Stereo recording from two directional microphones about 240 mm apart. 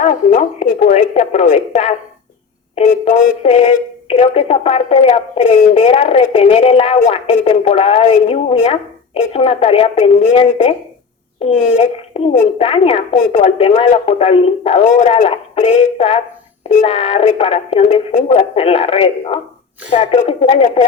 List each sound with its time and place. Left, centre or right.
0.0 s a woman's voice: left